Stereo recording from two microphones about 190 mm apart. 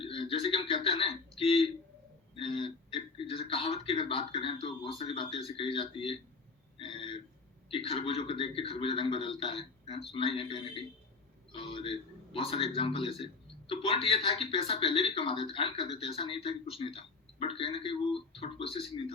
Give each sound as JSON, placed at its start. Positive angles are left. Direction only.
{"t": 0.0, "sound": "frog", "side_deg": 30}
{"t": 2.3, "sound": "a man's voice", "side_deg": 25}
{"t": 6.7, "sound": "a sound", "side_deg": 25}
{"t": 7.7, "sound": "speech", "side_deg": 30}